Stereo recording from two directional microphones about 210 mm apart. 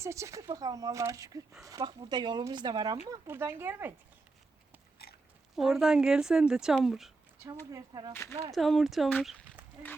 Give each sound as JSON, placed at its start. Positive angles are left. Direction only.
{"t": 0.0, "sound": "speech", "side_deg": -15}
{"t": 5.5, "sound": "speech", "side_deg": 0}
{"t": 7.7, "sound": "speech", "side_deg": -20}
{"t": 8.1, "sound": "speech", "side_deg": 10}